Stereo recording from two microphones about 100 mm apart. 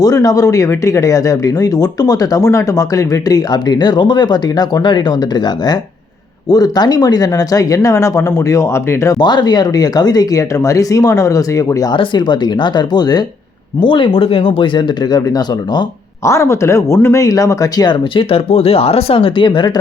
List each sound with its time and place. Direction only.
0.0 s speech: 40° left (ahead or behind)
9.1 s speech: 45° left (ahead or behind)
11.9 s speech: 50° left (ahead or behind)
13.7 s speech: 55° left (ahead or behind)
16.2 s speech: 30° left (ahead or behind)
18.1 s speech: 65° left (ahead or behind)